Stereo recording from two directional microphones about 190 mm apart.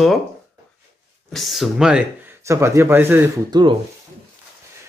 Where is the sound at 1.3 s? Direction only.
Centre (ahead or behind).